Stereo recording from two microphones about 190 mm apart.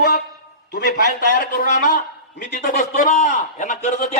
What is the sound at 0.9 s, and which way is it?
A man's voice, 50° left (ahead or behind).